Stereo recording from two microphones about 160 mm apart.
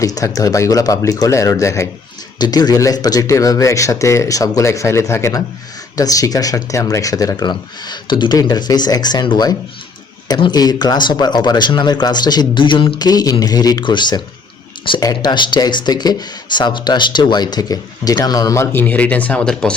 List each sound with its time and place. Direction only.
0.0 s speech: 20° left (ahead or behind); by 19.7 s 5° left (ahead or behind)